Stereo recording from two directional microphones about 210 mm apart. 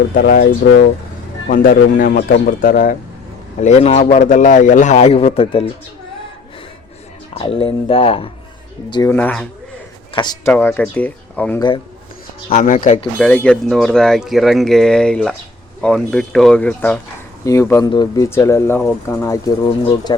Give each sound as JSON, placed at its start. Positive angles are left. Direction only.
{"t": 0.1, "sound": "speech", "side_deg": 45}
{"t": 1.5, "sound": "a man's voice", "side_deg": 40}
{"t": 7.3, "sound": "speech", "side_deg": 25}
{"t": 9.1, "sound": "speech", "side_deg": 5}
{"t": 10.2, "sound": "speech", "side_deg": 20}
{"t": 10.5, "sound": "speech", "side_deg": 10}
{"t": 12.5, "sound": "a man's voice", "side_deg": 40}
{"t": 13.1, "sound": "speech", "side_deg": 5}